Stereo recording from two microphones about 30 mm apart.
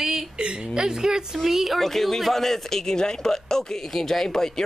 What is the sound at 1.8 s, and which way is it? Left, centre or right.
A man's voice, centre.